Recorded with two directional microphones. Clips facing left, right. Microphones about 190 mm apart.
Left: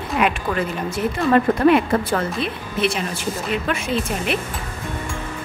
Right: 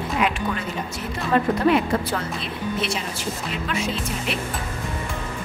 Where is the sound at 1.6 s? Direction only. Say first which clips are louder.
Left 4 dB; 60° left (ahead or behind).